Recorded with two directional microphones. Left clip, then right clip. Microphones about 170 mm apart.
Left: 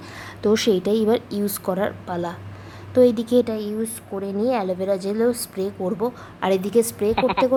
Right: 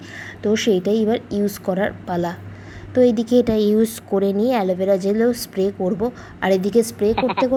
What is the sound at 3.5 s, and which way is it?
A woman's voice, 25° right (ahead or behind).